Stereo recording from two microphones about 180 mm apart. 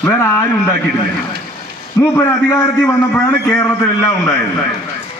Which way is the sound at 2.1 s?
15° left (ahead or behind).